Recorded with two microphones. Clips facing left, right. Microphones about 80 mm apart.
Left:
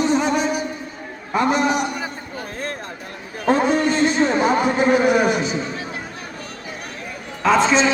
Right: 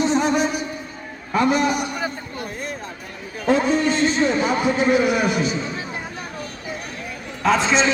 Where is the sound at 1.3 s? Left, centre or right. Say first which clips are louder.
Even; left.